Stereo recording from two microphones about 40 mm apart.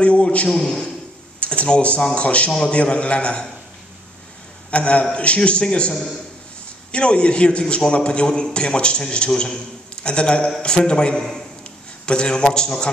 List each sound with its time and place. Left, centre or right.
0.0 s a man's voice: left
0.5 s a man's voice: centre
1.4 s a man's voice: left
4.6 s a man's voice: left